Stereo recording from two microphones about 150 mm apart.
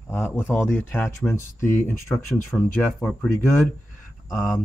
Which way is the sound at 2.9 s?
5° left (ahead or behind).